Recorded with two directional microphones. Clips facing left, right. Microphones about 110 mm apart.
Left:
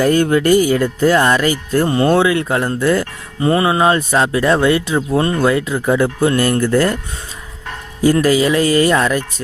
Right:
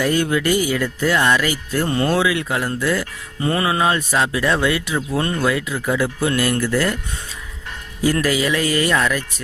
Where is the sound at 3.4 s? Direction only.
30° left (ahead or behind); by 7.0 s 45° left (ahead or behind).